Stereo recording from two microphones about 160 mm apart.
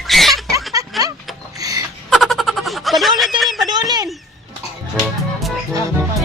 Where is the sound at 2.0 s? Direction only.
Centre (ahead or behind).